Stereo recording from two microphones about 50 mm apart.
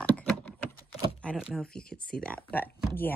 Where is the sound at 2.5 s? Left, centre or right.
Left.